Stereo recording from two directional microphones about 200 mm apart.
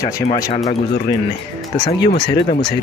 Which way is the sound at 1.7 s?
25° left (ahead or behind).